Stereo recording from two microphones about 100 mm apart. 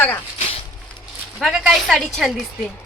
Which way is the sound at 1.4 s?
5° right (ahead or behind).